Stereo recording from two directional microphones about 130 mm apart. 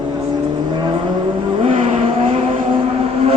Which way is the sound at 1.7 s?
55° right (ahead or behind).